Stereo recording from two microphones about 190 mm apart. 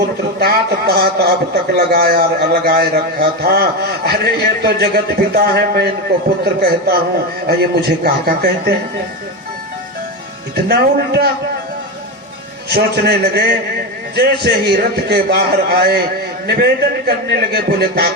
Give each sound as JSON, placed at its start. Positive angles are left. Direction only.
{"t": 0.3, "sound": "a man's voice", "side_deg": -55}
{"t": 10.5, "sound": "a man's voice", "side_deg": -60}
{"t": 12.7, "sound": "a man's voice", "side_deg": -55}
{"t": 17.1, "sound": "a man's voice", "side_deg": -55}